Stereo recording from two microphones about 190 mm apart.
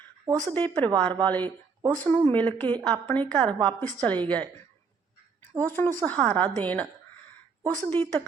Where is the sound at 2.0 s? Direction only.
10° left (ahead or behind).